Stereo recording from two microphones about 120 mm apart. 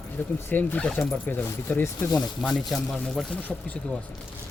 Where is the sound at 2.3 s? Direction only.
Centre (ahead or behind).